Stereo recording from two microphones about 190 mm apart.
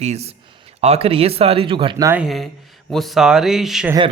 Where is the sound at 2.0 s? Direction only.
5° right (ahead or behind).